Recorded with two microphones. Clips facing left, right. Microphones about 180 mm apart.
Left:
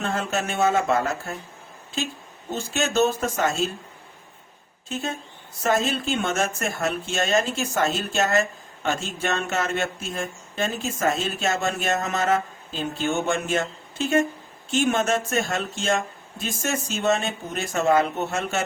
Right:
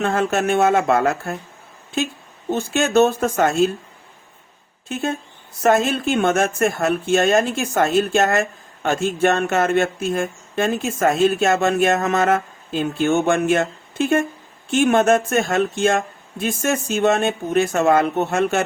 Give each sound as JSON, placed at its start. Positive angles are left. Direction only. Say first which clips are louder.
{"t": 0.0, "sound": "speech", "louder": "right 7 dB", "side_deg": -60}
{"t": 2.5, "sound": "speech", "louder": "right 7 dB", "side_deg": -55}
{"t": 5.6, "sound": "speech", "louder": "right 6 dB", "side_deg": -55}